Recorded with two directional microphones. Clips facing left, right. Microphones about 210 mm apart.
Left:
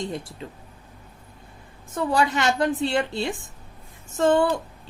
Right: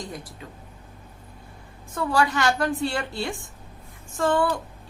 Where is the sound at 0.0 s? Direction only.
25° left (ahead or behind).